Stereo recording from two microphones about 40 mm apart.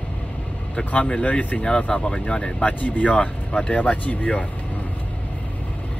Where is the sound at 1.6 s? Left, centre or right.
Left.